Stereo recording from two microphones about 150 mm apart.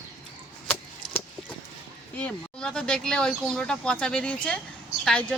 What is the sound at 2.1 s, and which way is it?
Speech, 10° left (ahead or behind).